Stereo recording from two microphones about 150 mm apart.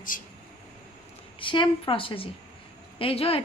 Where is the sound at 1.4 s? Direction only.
35° left (ahead or behind).